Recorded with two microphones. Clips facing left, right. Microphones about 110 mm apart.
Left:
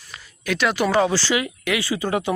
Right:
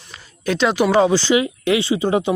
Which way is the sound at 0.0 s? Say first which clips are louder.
Right 7 dB; 30° right (ahead or behind).